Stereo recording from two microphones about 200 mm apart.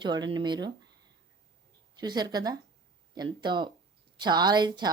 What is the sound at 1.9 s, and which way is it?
Speech, 20° right (ahead or behind).